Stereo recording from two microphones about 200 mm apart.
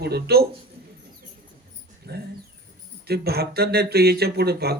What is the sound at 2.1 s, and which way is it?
Speech, 50° right (ahead or behind).